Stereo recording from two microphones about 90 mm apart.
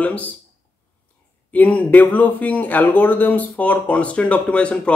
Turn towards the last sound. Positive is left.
turn(degrees=15)  # may be behind; listen again after turning